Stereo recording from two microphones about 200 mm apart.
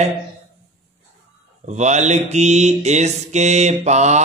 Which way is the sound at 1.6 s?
35° right (ahead or behind).